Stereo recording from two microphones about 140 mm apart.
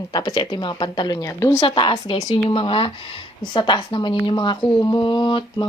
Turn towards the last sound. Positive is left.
turn(degrees=35)  # may be behind; listen again after turning